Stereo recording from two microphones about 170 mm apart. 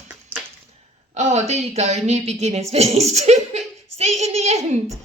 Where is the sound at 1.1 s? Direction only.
40° right (ahead or behind).